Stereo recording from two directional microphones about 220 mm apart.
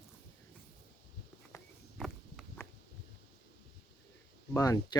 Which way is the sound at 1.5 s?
Centre (ahead or behind).